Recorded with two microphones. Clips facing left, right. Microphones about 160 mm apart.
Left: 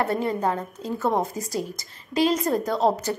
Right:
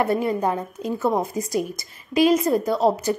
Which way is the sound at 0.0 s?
15° right (ahead or behind).